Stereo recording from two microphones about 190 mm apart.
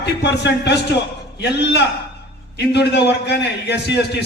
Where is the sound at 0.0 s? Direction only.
65° left (ahead or behind).